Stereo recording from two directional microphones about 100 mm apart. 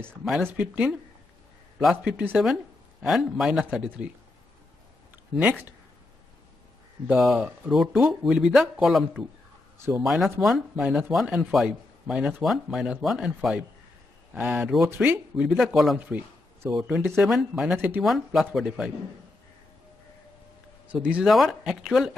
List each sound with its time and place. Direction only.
0.4 s speech: 15° right (ahead or behind)
5.4 s speech: 15° right (ahead or behind)
7.2 s speech: centre (ahead or behind)
16.0 s a sound: 15° right (ahead or behind)
16.7 s speech: 5° right (ahead or behind)
20.9 s speech: 15° right (ahead or behind)
21.3 s speech: centre (ahead or behind)